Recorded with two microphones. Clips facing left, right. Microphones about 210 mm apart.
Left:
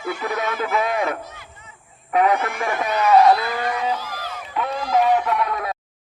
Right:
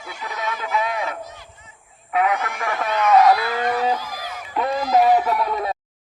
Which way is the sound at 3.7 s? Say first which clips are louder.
Right 3 dB; 10° right (ahead or behind).